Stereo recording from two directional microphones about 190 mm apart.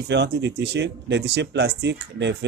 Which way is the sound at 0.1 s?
65° right (ahead or behind).